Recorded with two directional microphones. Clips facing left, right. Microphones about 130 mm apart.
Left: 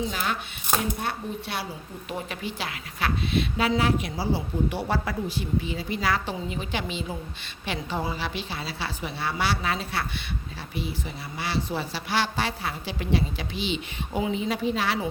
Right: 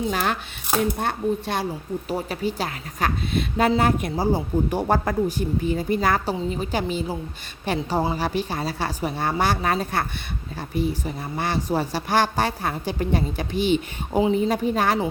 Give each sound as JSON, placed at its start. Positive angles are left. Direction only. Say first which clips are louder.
{"t": 0.1, "sound": "a woman's voice", "louder": "right 5 dB", "side_deg": -45}
{"t": 2.0, "sound": "a woman's voice", "louder": "right 6 dB", "side_deg": -35}